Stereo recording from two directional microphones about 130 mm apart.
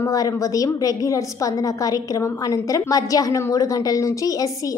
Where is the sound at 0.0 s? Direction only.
25° left (ahead or behind).